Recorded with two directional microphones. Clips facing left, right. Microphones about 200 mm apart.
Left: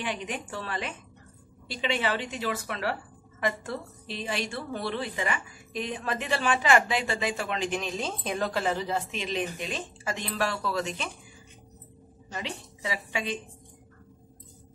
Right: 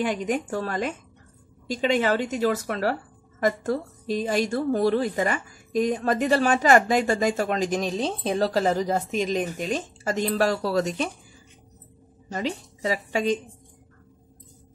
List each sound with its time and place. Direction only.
0.0 s a woman's voice: 45° right (ahead or behind)
12.3 s a woman's voice: 40° right (ahead or behind)